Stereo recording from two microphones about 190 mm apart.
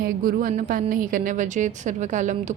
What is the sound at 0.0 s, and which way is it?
A woman's voice, 50° right (ahead or behind).